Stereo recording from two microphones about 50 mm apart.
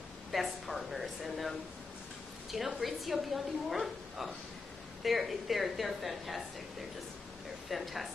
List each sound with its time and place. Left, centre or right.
0.3 s a sound: centre
2.5 s a woman's voice: centre
7.7 s a woman's voice: centre